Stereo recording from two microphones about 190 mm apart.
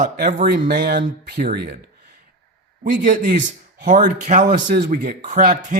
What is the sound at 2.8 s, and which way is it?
Speech, 45° right (ahead or behind).